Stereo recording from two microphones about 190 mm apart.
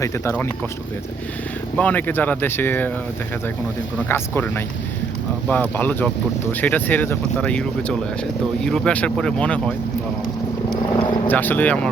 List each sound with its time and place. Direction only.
0.0 s speech: 15° left (ahead or behind)
1.7 s speech: 5° left (ahead or behind)
3.9 s speech: 10° left (ahead or behind)
10.9 s vehicle: 25° left (ahead or behind)
11.3 s speech: 10° left (ahead or behind)